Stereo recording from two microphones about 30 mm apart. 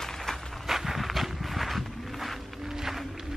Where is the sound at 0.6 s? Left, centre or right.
Centre.